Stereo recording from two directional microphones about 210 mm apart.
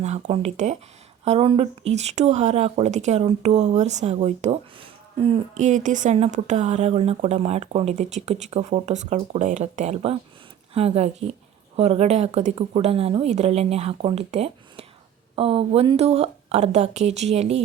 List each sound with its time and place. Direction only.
0.0 s speech: 30° right (ahead or behind)